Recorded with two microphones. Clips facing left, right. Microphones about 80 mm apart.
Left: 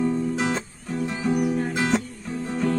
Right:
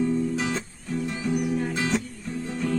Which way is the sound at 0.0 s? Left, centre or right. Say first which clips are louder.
Left 1 dB; left.